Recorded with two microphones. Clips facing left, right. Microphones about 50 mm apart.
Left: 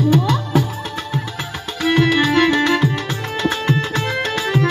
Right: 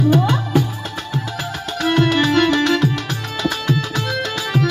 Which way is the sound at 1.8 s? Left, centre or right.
Centre.